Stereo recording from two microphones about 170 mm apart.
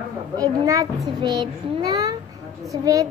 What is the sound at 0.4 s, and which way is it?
A child's voice, 20° right (ahead or behind).